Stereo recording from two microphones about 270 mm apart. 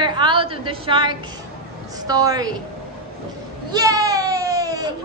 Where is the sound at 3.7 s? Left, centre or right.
Centre.